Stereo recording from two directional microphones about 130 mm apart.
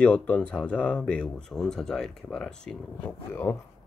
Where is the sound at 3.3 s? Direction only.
15° left (ahead or behind).